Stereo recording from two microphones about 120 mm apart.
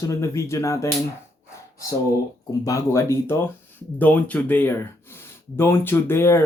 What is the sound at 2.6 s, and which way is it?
Speech, 30° left (ahead or behind).